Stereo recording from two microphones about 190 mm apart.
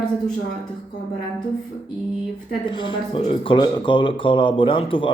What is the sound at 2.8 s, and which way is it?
Speech, 25° left (ahead or behind).